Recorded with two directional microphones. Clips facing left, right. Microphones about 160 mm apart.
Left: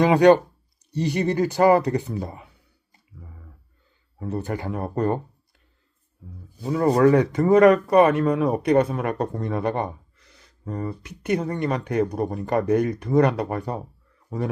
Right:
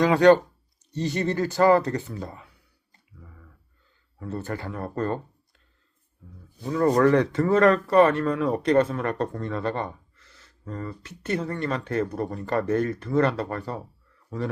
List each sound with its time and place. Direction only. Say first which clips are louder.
0.0 s speech: left 2 dB; 15° left (ahead or behind)
3.2 s a sound: left 3 dB; 25° left (ahead or behind)
4.2 s speech: left 4 dB; 20° left (ahead or behind)
6.7 s speech: left 2 dB; 15° left (ahead or behind)